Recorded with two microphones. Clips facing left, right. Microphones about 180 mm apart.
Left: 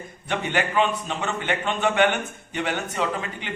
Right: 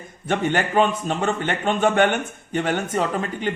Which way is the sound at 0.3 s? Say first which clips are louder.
Right 4 dB; 45° right (ahead or behind).